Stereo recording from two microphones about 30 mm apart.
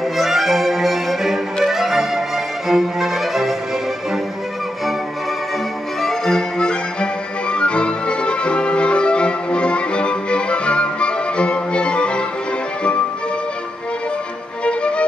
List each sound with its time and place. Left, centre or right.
0.2 s violin: centre
1.6 s music: centre
6.0 s music: centre
6.6 s music: left
14.6 s music: left